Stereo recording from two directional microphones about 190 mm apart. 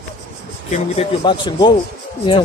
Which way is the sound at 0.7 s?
35° left (ahead or behind).